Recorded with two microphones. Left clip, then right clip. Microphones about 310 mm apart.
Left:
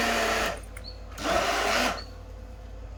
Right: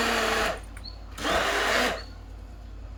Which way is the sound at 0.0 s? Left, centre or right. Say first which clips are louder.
Right 1 dB; centre.